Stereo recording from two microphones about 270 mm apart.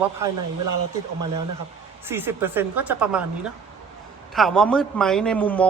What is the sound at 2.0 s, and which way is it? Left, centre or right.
A woman's voice, centre.